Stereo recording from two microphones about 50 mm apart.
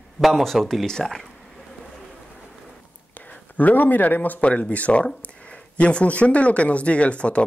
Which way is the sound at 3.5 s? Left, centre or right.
Left.